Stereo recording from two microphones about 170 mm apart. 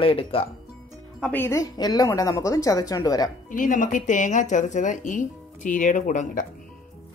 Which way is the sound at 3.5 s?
50° left (ahead or behind).